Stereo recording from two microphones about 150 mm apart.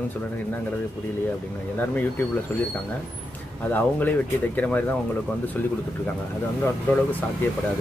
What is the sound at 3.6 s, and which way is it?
Speech, 10° left (ahead or behind).